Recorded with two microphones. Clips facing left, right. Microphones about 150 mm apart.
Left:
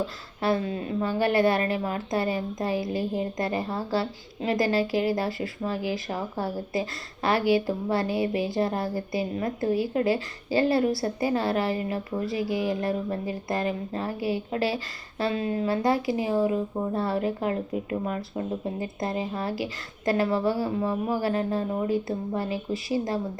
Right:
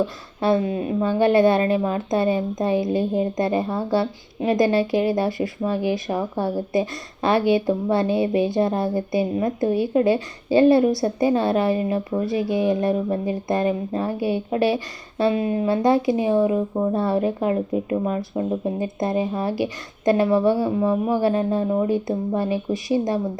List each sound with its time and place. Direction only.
0.3 s a woman's voice: 20° right (ahead or behind)